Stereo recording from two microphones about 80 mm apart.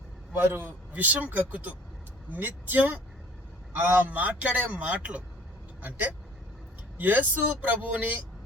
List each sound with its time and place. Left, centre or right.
0.5 s a man's voice: right